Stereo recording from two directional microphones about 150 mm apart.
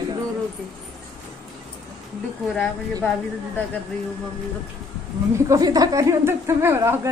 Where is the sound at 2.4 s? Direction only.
5° left (ahead or behind).